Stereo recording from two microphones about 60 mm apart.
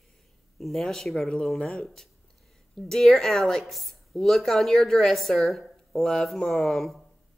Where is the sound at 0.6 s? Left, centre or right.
Centre.